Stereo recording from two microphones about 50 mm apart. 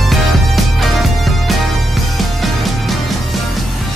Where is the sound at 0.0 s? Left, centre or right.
Centre.